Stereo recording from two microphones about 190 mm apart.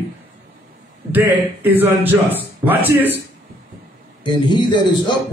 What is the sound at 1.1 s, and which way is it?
A man's voice, 10° right (ahead or behind).